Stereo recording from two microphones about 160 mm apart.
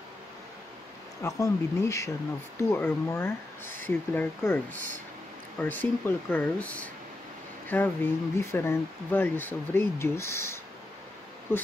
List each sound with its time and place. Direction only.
1.2 s speech: 20° left (ahead or behind)
5.6 s speech: 10° left (ahead or behind)